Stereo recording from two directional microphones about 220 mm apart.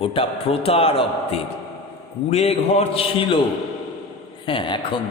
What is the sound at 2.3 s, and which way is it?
A man's voice, 30° left (ahead or behind).